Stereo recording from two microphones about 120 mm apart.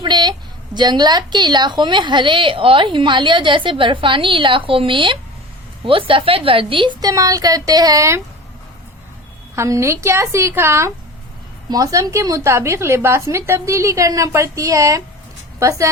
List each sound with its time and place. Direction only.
0.0 s a woman's voice: 35° right (ahead or behind)
7.0 s a woman's voice: 30° right (ahead or behind)
9.6 s a woman's voice: 25° right (ahead or behind)